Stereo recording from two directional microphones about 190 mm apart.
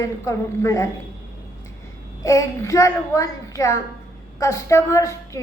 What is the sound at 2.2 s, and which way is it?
A woman's voice, 15° left (ahead or behind).